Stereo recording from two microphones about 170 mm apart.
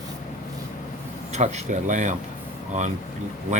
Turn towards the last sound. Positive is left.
turn(degrees=-45)  # may be behind; listen again after turning